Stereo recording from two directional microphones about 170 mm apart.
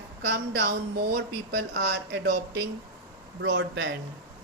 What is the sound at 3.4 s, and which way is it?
Speech, 90° right.